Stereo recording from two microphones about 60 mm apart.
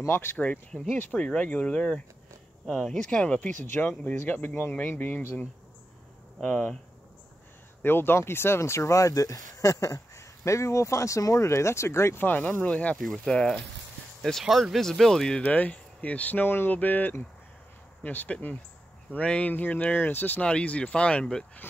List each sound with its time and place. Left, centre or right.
0.0 s speech: left
0.9 s speech: left
2.6 s speech: centre
3.1 s speech: centre
3.6 s speech: left
6.4 s speech: left
7.8 s speech: left
12.3 s speech: left; by 13.6 s centre
14.4 s speech: centre
15.4 s speech: left
20.4 s speech: centre